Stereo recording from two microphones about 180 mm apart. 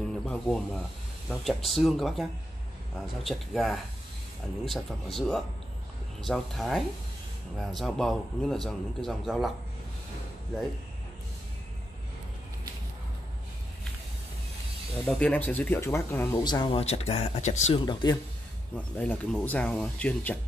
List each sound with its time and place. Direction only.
0.2 s a man's voice: 5° left (ahead or behind)
15.0 s speech: 5° left (ahead or behind)
16.4 s speech: 25° left (ahead or behind)
17.8 s speech: 25° left (ahead or behind)
18.9 s speech: 10° left (ahead or behind)